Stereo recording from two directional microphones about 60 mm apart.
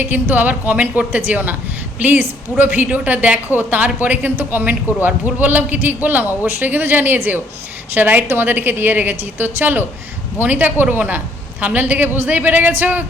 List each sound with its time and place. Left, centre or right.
0.0 s a woman's voice: right